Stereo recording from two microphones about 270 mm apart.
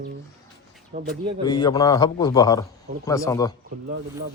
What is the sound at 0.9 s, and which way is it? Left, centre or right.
Speech, right.